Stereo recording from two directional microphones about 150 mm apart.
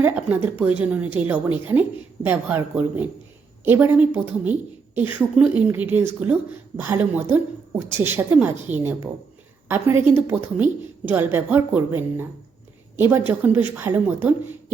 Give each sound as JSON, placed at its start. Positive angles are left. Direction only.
{"t": 0.0, "sound": "a woman's voice", "side_deg": -10}